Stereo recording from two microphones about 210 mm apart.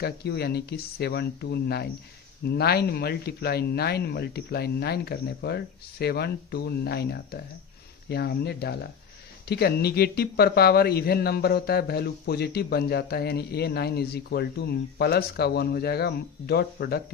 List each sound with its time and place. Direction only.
0.0 s speech: 50° left (ahead or behind)